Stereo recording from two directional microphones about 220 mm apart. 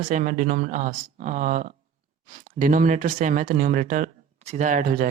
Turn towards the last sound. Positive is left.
turn(degrees=-35)  # may be behind; listen again after turning